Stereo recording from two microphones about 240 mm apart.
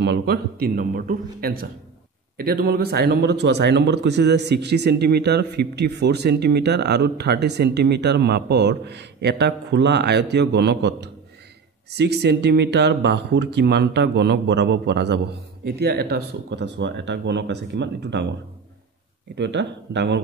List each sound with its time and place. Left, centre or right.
0.0 s a man's voice: right
19.3 s speech: right